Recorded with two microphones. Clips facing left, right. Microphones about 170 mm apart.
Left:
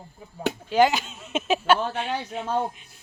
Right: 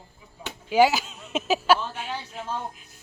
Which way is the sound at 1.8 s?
65° left (ahead or behind).